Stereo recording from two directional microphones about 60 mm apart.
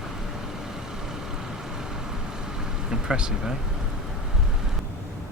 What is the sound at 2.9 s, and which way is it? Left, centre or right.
Speech, centre.